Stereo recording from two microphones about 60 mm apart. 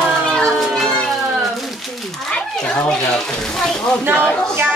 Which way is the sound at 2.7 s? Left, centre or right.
Left.